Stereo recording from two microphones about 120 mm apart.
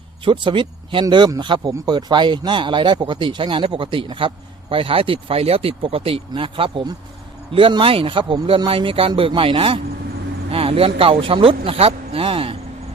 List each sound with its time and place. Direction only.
0.3 s a man's voice: 45° right (ahead or behind)